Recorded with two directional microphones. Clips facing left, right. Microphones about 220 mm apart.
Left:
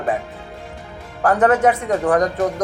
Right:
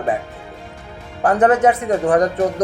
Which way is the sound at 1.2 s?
20° right (ahead or behind).